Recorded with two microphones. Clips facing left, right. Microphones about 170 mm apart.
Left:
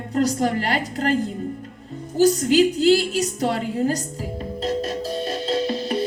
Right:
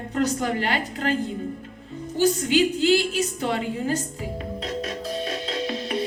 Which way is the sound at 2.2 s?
40° left (ahead or behind).